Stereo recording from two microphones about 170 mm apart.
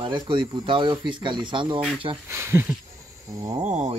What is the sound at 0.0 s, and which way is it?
Speech, 30° right (ahead or behind).